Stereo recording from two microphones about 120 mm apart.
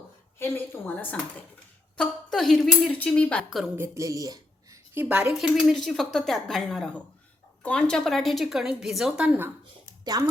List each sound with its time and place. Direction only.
0.3 s a woman's voice: 20° left (ahead or behind)
2.0 s a woman's voice: 5° left (ahead or behind)
3.8 s speech: 25° right (ahead or behind)
4.9 s a woman's voice: 10° right (ahead or behind)
10.0 s speech: 35° right (ahead or behind)